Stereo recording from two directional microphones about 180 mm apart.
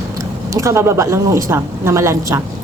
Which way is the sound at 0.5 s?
15° right (ahead or behind).